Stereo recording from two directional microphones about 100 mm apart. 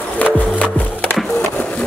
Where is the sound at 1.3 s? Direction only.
20° left (ahead or behind).